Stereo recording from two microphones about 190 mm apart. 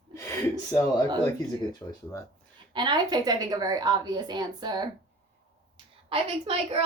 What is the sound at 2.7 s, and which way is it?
A woman's voice, 25° right (ahead or behind).